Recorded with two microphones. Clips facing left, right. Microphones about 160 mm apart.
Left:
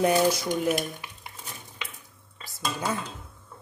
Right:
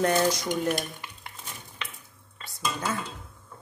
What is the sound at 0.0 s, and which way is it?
Dishes, 10° left (ahead or behind).